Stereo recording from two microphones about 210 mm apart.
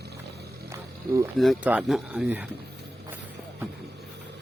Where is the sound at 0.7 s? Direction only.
15° right (ahead or behind).